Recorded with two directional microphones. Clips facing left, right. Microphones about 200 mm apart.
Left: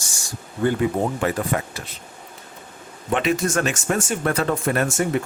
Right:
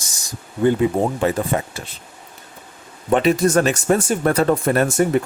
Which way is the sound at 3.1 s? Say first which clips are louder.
Right 6 dB; 35° right (ahead or behind).